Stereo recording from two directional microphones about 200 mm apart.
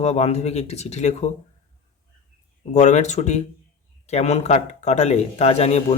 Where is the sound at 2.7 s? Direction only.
35° left (ahead or behind).